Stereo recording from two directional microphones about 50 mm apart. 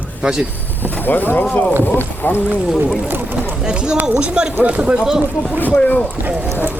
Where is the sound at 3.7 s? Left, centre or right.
Centre.